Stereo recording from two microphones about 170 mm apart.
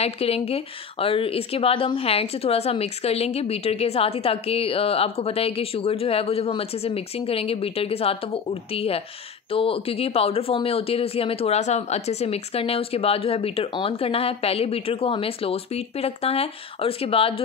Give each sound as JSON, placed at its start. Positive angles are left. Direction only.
{"t": 0.0, "sound": "a woman's voice", "side_deg": 35}